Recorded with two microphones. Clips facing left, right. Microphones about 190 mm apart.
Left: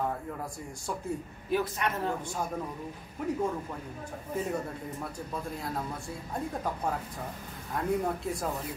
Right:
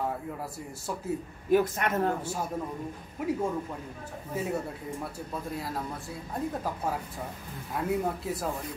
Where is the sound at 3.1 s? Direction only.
10° right (ahead or behind).